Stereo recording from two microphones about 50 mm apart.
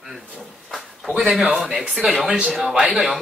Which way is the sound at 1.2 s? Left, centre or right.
Centre.